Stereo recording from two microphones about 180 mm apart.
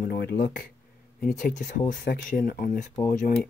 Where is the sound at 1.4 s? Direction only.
45° left (ahead or behind).